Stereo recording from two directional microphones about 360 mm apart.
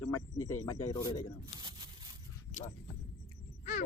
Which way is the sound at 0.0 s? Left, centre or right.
Centre.